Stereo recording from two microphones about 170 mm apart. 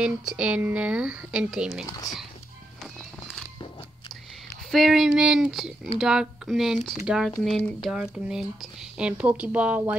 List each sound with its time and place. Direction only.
0.0 s a woman's voice: 5° right (ahead or behind)
1.9 s speech: 20° left (ahead or behind)
4.6 s a woman's voice: centre (ahead or behind)